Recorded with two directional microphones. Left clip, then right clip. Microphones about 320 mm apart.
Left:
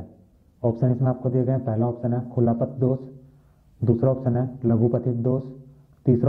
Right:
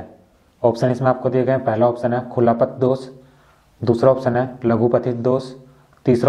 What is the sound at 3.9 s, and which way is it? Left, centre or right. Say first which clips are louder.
A man's voice: right 8 dB; centre.